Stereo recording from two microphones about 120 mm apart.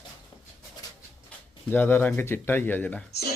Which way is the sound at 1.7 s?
15° left (ahead or behind).